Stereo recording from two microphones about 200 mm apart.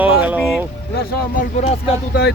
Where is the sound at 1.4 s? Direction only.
35° left (ahead or behind).